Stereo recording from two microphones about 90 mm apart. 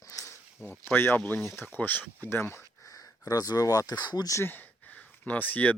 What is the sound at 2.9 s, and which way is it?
Speech, 40° left (ahead or behind).